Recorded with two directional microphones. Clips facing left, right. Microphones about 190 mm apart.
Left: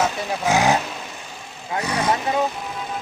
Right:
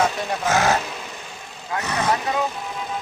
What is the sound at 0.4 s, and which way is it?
Speech, 15° left (ahead or behind).